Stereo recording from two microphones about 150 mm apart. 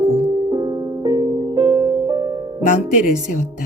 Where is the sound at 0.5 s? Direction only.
25° right (ahead or behind).